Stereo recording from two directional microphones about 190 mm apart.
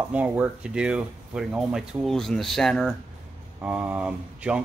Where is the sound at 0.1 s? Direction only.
10° right (ahead or behind).